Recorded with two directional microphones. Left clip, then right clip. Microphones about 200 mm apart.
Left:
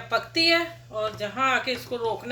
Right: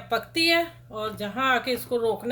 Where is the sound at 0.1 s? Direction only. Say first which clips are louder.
Left 1 dB; 55° right (ahead or behind).